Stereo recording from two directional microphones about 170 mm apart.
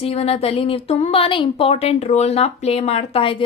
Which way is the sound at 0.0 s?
35° left (ahead or behind).